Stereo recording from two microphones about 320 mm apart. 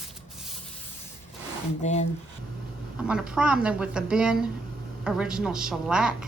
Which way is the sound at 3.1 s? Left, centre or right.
Centre.